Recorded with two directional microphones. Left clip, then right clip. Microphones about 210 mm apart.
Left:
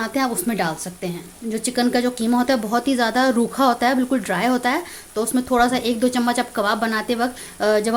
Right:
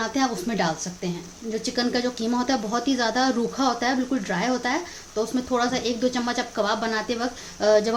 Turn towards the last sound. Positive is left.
turn(degrees=30)  # may be behind; listen again after turning